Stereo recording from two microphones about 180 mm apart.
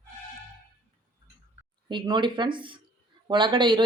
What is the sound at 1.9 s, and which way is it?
Speech, 25° right (ahead or behind).